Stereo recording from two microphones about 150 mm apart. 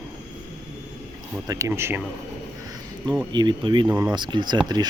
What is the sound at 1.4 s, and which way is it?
Speech, 20° right (ahead or behind).